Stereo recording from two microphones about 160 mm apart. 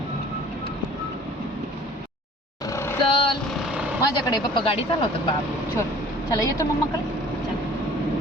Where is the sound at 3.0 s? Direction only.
30° left (ahead or behind).